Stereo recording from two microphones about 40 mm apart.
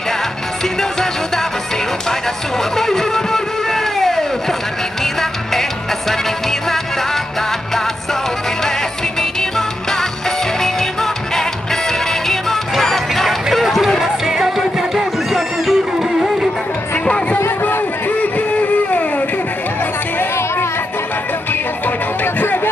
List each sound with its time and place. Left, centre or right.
2.7 s music: centre
9.2 s music: centre
17.0 s music: left
18.0 s music: left
21.8 s music: left